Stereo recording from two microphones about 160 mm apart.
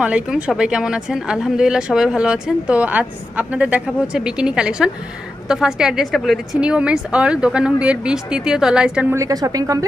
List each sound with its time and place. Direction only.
0.0 s a woman's voice: 5° right (ahead or behind)
9.1 s a woman's voice: 20° right (ahead or behind)